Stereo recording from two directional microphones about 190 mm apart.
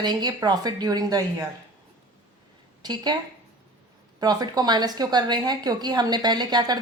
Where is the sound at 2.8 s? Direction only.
20° right (ahead or behind).